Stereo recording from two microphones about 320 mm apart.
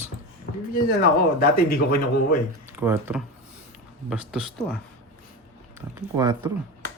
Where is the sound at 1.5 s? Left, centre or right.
Left.